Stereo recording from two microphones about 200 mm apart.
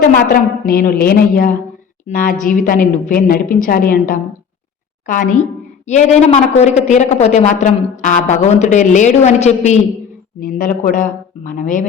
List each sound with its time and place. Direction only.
0.0 s a woman's voice: 45° left (ahead or behind)